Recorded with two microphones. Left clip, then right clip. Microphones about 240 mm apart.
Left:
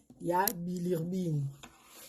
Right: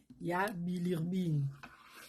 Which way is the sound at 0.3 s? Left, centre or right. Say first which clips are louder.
Left 5 dB; right.